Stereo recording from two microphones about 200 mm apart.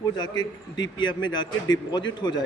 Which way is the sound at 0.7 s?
20° left (ahead or behind).